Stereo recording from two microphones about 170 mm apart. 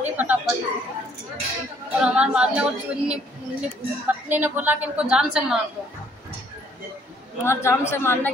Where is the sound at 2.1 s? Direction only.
5° right (ahead or behind).